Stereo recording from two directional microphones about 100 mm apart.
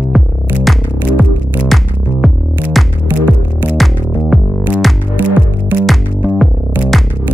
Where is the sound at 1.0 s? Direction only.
15° right (ahead or behind).